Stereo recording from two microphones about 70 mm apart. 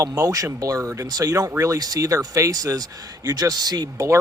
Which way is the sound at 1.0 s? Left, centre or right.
Right.